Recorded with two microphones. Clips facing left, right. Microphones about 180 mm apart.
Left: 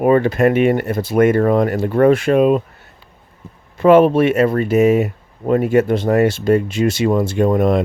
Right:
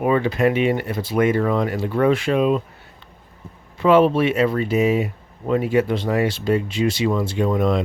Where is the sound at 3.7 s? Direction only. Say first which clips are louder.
Left 5 dB; 50° left (ahead or behind).